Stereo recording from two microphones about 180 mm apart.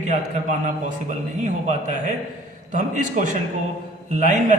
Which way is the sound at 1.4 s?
40° right (ahead or behind).